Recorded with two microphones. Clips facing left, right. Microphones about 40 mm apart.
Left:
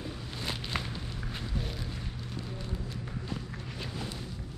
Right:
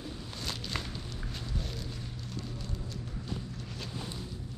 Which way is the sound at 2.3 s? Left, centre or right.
Centre.